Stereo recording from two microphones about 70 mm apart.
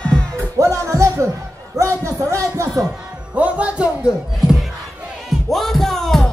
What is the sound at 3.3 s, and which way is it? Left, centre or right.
Music, centre.